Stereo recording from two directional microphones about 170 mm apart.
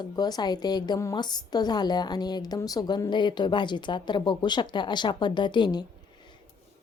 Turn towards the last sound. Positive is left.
turn(degrees=25)  # may be behind; listen again after turning